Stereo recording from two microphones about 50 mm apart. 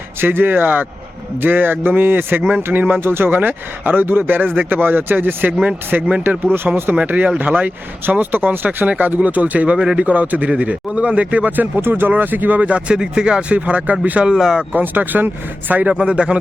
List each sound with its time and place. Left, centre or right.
0.2 s speech: right
3.0 s speech: right
3.2 s a man's voice: right
9.7 s speech: centre
10.0 s a man's voice: right
13.5 s a man's voice: right
14.3 s speech: centre
14.7 s speech: right
15.9 s a man's voice: right